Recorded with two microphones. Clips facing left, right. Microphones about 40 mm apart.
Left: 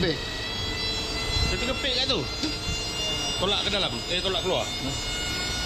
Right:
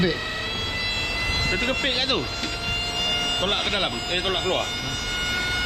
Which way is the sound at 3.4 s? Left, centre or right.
Right.